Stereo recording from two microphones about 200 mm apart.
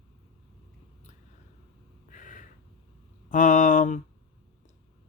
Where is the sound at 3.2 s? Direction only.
40° left (ahead or behind).